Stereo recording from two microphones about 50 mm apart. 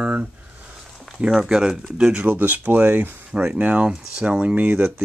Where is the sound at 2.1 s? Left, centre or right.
Right.